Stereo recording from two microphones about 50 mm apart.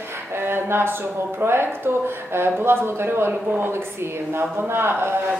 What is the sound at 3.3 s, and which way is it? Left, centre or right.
Speech, right.